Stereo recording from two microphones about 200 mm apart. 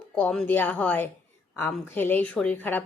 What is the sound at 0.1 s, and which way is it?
Speech, 5° left (ahead or behind).